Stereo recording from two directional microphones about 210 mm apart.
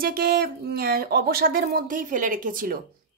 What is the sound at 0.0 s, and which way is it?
A woman's voice, 45° right (ahead or behind).